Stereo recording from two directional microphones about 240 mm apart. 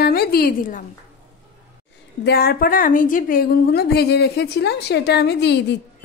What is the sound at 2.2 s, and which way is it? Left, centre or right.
A woman's voice, left.